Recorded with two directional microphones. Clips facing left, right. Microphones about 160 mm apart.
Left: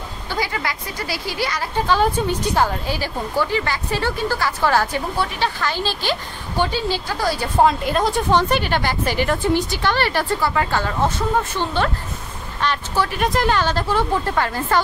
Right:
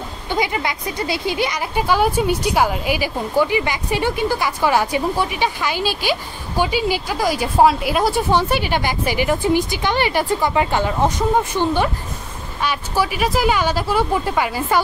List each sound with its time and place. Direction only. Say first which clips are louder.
0.3 s speech: right 4 dB; 20° right (ahead or behind)